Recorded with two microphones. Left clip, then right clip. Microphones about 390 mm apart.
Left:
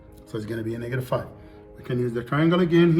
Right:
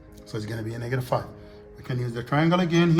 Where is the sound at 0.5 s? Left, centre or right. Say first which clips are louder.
Left 2 dB; right.